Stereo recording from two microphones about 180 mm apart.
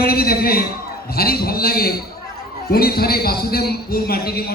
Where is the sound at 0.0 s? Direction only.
55° left (ahead or behind).